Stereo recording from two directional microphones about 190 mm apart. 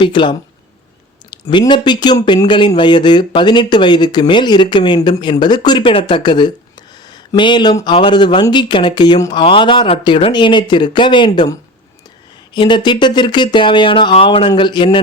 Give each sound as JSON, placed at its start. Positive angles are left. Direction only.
{"t": 0.0, "sound": "speech", "side_deg": 25}
{"t": 12.5, "sound": "speech", "side_deg": 25}